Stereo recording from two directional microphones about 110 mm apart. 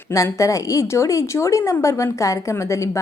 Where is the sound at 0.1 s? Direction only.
30° left (ahead or behind).